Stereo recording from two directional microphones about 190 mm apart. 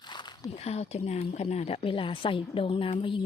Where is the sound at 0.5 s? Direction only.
35° left (ahead or behind).